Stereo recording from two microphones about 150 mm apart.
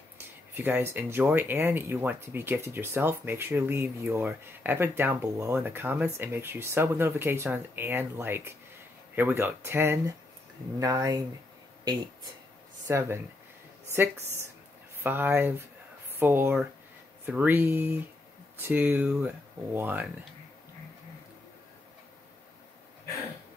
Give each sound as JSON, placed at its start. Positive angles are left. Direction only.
{"t": 0.6, "sound": "speech", "side_deg": -15}
{"t": 12.8, "sound": "speech", "side_deg": -15}